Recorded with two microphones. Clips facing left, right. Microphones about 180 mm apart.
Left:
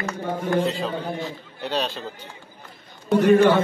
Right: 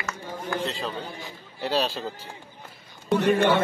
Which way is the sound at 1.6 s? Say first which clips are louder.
Right 1 dB; 5° right (ahead or behind).